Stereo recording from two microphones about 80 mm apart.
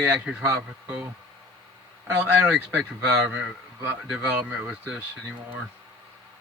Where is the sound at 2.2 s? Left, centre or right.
Centre.